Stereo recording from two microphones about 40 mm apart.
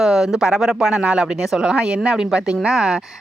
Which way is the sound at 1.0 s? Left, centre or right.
Right.